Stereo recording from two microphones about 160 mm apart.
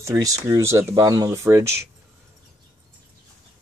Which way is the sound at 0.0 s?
20° right (ahead or behind).